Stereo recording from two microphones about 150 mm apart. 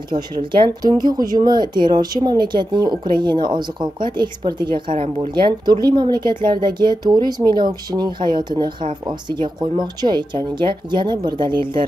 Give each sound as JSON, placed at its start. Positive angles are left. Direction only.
{"t": 0.1, "sound": "speech", "side_deg": -30}